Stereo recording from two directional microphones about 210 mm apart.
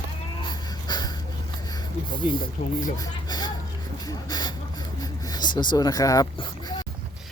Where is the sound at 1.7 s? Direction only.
20° left (ahead or behind).